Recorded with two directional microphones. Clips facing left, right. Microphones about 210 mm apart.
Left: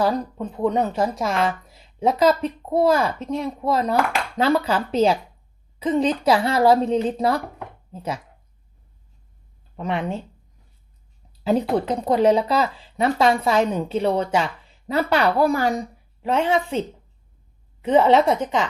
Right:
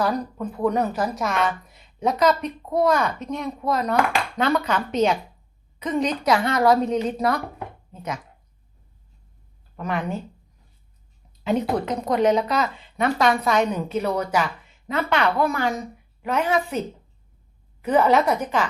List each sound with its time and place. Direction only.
0.0 s a woman's voice: 25° left (ahead or behind)
9.7 s speech: 25° left (ahead or behind)
11.9 s a woman's voice: 30° left (ahead or behind)
17.8 s speech: 25° left (ahead or behind)